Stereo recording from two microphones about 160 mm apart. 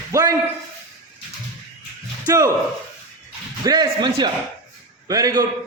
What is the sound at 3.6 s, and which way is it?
Speech, 25° right (ahead or behind).